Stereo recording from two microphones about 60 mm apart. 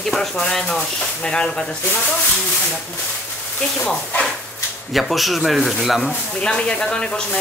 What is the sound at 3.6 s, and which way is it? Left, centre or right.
Speech, centre.